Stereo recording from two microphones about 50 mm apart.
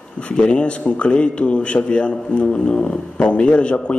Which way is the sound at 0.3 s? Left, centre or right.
Left.